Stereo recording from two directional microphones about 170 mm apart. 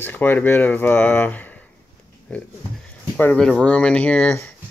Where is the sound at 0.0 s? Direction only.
10° left (ahead or behind).